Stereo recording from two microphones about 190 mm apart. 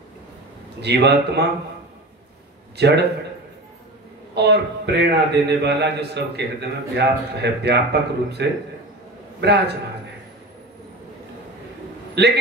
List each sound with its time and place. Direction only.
0.7 s a man's voice: 60° right (ahead or behind)
2.8 s a man's voice: 60° right (ahead or behind)
4.4 s a man's voice: 60° right (ahead or behind)
12.2 s a man's voice: 60° right (ahead or behind)